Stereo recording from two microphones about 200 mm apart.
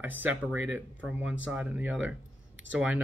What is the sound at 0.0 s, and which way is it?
Speech, 10° right (ahead or behind).